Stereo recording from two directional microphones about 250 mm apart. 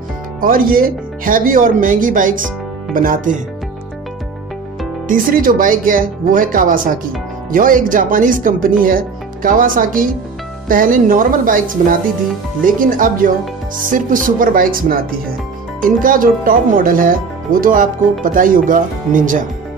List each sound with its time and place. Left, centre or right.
0.4 s speech: right
5.0 s speech: right